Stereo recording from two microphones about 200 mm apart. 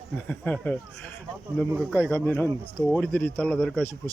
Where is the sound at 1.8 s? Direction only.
10° left (ahead or behind).